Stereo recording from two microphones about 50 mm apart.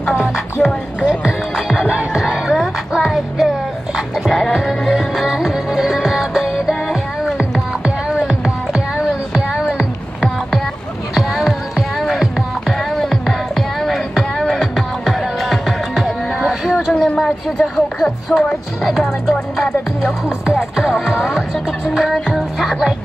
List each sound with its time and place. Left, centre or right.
0.6 s music: centre
1.9 s music: centre
2.5 s music: centre
4.6 s music: centre
8.7 s music: centre
11.1 s music: centre
20.4 s music: centre
21.9 s music: centre